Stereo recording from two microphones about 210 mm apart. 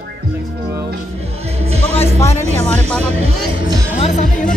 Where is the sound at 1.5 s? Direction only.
30° right (ahead or behind).